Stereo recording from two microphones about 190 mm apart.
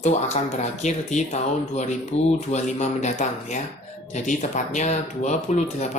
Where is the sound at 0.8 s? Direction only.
35° left (ahead or behind).